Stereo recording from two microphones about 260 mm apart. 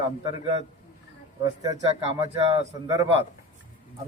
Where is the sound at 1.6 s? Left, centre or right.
Centre.